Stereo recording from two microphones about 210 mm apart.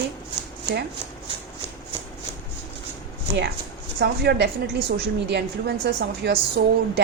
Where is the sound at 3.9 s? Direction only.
50° right (ahead or behind).